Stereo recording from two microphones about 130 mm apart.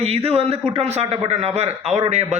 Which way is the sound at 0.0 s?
50° right (ahead or behind).